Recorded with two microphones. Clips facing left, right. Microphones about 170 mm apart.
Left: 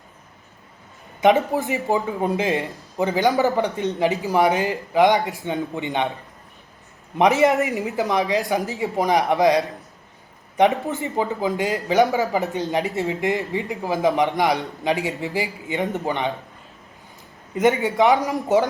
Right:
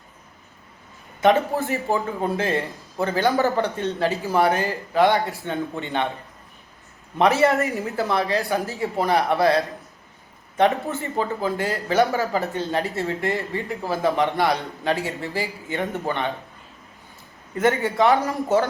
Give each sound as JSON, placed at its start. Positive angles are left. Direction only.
{"t": 1.2, "sound": "a man's voice", "side_deg": 15}
{"t": 7.2, "sound": "a man's voice", "side_deg": 15}
{"t": 10.8, "sound": "a man's voice", "side_deg": 15}
{"t": 17.5, "sound": "a man's voice", "side_deg": 15}